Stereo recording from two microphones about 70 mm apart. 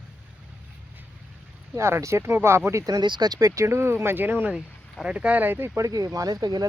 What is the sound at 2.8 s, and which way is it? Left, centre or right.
Speech, right.